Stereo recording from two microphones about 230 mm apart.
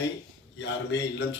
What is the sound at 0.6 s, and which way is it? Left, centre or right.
Speech, left.